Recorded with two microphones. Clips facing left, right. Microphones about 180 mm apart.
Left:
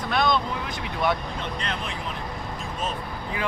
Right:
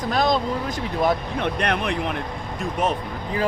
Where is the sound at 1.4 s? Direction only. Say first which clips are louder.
Right 8 dB; 65° right (ahead or behind).